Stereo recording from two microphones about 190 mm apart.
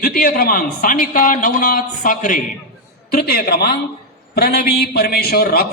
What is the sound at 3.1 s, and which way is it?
A man's voice, 55° left (ahead or behind).